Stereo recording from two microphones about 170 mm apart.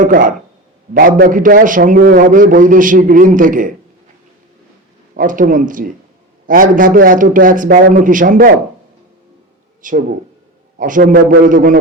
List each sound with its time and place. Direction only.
0.0 s a man's voice: 50° right (ahead or behind)
5.1 s a man's voice: 50° right (ahead or behind)
9.8 s a man's voice: 50° right (ahead or behind)